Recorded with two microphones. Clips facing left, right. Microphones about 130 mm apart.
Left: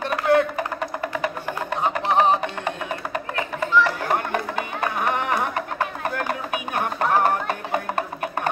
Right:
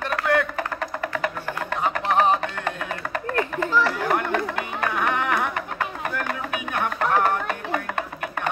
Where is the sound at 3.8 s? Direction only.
25° left (ahead or behind).